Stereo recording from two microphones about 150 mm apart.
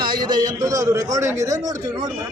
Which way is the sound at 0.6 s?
25° right (ahead or behind).